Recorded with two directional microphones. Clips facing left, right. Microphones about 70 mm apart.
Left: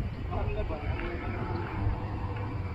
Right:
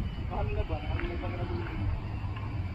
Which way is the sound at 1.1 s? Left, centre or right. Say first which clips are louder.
Left 1 dB; left.